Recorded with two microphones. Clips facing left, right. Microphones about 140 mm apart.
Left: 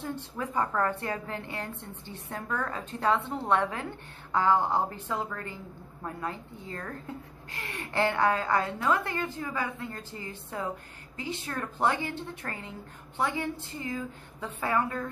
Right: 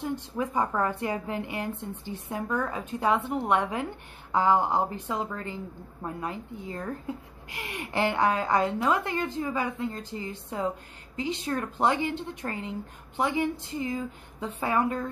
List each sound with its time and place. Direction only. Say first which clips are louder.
0.0 s a woman's voice: right 4 dB; 15° right (ahead or behind)